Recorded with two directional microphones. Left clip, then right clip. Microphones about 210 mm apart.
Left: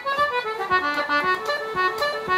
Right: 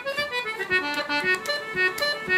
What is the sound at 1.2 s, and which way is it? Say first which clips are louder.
Music: left 2 dB; 55° left (ahead or behind).